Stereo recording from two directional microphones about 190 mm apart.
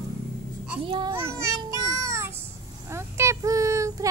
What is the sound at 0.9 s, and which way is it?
Speech, 25° right (ahead or behind).